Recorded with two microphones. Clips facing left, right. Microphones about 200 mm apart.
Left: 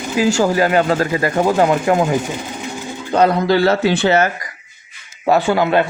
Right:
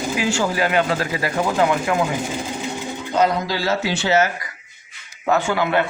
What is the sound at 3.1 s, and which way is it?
Speech, 60° left (ahead or behind).